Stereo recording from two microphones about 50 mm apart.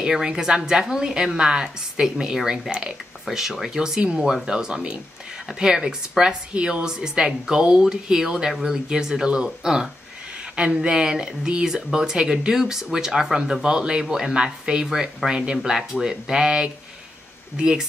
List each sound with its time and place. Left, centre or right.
0.0 s speech: centre